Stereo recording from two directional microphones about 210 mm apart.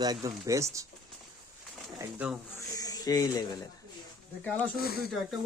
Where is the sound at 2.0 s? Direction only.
5° right (ahead or behind).